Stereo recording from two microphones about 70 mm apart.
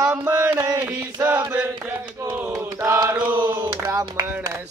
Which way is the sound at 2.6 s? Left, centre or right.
Right.